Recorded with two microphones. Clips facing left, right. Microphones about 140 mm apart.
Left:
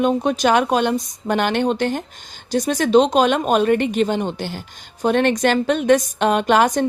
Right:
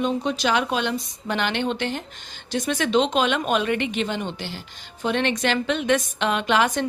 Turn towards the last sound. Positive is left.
turn(degrees=45)  # may be behind; listen again after turning